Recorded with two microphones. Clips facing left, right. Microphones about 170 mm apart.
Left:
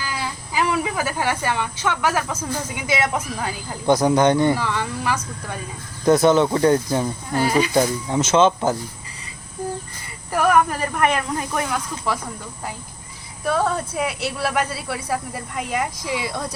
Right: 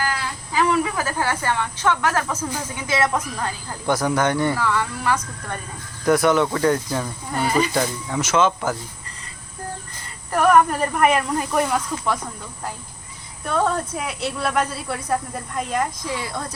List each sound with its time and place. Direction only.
0.1 s a sound: 15° left (ahead or behind)
2.7 s speech: 10° left (ahead or behind)
6.1 s speech: 25° left (ahead or behind)
7.3 s speech: centre (ahead or behind)
7.7 s speech: 20° left (ahead or behind)
10.3 s speech: centre (ahead or behind)
13.4 s speech: 5° left (ahead or behind)